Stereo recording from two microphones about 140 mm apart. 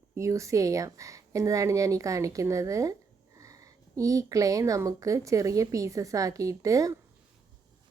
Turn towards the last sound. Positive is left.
turn(degrees=-25)  # may be behind; listen again after turning